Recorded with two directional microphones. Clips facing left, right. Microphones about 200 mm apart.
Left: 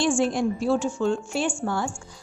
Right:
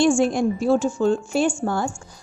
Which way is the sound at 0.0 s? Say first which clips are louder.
Right 4 dB; 45° right (ahead or behind).